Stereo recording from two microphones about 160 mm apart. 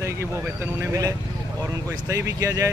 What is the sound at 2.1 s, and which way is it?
Speech, 20° right (ahead or behind).